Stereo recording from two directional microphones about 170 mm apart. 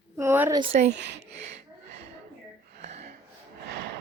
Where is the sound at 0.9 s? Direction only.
90° right.